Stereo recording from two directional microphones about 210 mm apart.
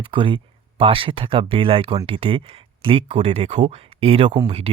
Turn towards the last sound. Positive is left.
turn(degrees=-30)  # may be behind; listen again after turning